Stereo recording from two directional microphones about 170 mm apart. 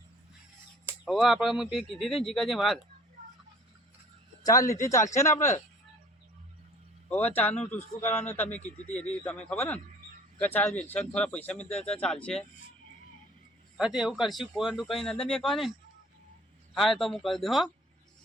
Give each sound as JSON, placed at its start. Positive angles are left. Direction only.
{"t": 1.0, "sound": "speech", "side_deg": 0}
{"t": 4.4, "sound": "speech", "side_deg": 20}
{"t": 7.3, "sound": "speech", "side_deg": 10}
{"t": 13.7, "sound": "speech", "side_deg": -5}
{"t": 16.7, "sound": "speech", "side_deg": 0}